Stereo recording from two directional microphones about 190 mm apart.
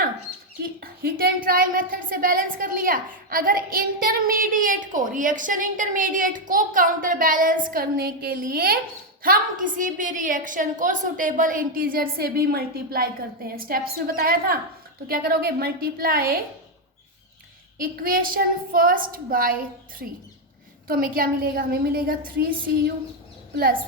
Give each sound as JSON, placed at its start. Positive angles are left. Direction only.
{"t": 0.6, "sound": "speech", "side_deg": -50}
{"t": 17.7, "sound": "speech", "side_deg": -50}
{"t": 20.8, "sound": "speech", "side_deg": -50}